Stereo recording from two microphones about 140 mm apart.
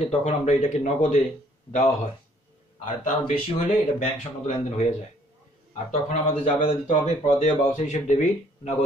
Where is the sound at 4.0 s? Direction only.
60° left (ahead or behind).